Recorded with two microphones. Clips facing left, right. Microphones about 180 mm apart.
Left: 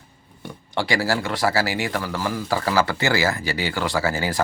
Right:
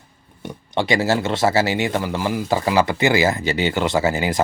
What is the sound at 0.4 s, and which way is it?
Speech, 20° right (ahead or behind).